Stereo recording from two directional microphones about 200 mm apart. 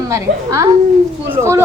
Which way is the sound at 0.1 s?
15° right (ahead or behind).